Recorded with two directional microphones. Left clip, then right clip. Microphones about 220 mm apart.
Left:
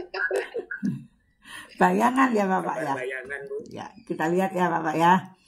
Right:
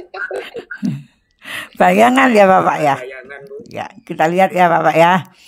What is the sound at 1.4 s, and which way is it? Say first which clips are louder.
A woman's voice: right 10 dB; 50° right (ahead or behind).